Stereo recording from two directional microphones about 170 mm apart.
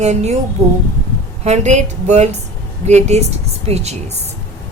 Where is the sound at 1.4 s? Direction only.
40° right (ahead or behind).